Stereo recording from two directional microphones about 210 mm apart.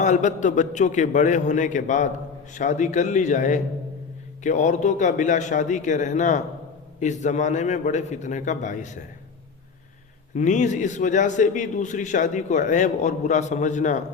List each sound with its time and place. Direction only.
0.0 s a man's voice: 35° left (ahead or behind)
10.3 s a man's voice: 35° left (ahead or behind)